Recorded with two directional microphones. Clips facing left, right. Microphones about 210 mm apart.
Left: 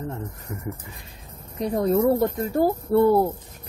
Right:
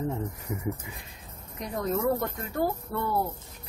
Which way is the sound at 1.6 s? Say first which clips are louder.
Left 8 dB; 30° left (ahead or behind).